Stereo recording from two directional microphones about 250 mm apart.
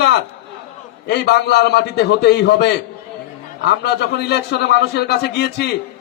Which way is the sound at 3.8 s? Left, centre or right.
Left.